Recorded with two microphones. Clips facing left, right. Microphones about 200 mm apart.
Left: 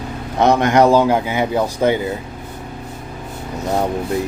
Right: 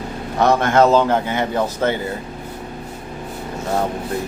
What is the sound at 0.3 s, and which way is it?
A man's voice, 20° left (ahead or behind).